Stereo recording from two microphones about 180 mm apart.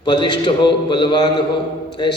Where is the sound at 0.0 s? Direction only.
25° left (ahead or behind).